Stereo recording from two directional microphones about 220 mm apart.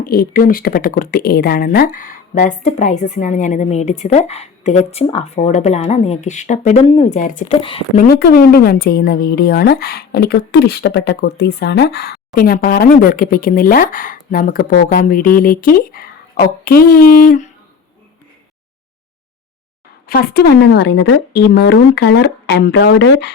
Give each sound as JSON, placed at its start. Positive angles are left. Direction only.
{"t": 0.0, "sound": "speech", "side_deg": 40}
{"t": 7.6, "sound": "speech", "side_deg": 25}
{"t": 8.0, "sound": "a woman's voice", "side_deg": 45}
{"t": 20.1, "sound": "a woman's voice", "side_deg": 45}